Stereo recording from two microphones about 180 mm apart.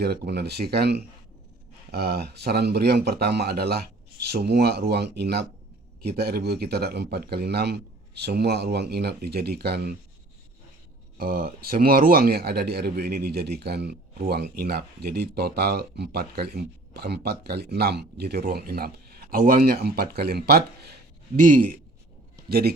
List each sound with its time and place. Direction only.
0.0 s a man's voice: 65° right (ahead or behind)
11.2 s a man's voice: 55° right (ahead or behind)
21.3 s speech: 50° right (ahead or behind)